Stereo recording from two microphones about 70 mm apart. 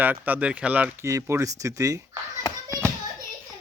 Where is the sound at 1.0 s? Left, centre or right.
Right.